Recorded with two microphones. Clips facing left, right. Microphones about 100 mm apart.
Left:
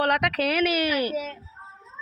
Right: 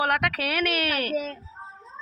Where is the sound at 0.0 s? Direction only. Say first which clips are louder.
Left 2 dB; centre (ahead or behind).